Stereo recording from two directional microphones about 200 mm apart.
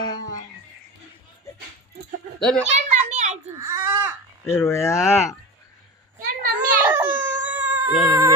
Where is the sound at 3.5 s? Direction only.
15° right (ahead or behind).